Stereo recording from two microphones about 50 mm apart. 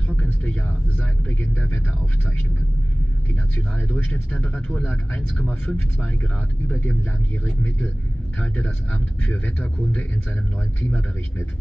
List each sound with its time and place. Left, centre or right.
0.2 s a sound: left
0.9 s vehicle: left
3.5 s speech: left
8.5 s speech: left